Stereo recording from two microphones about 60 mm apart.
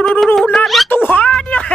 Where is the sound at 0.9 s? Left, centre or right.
Left.